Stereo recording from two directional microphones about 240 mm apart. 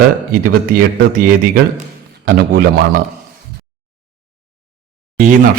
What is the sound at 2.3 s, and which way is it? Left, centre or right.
Speech, right.